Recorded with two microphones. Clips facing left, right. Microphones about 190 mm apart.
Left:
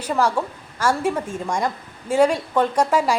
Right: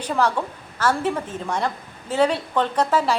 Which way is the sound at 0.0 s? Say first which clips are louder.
Left 1 dB; 10° left (ahead or behind).